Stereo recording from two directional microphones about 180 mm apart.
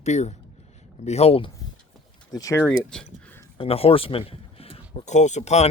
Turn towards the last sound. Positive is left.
turn(degrees=40)  # may be behind; listen again after turning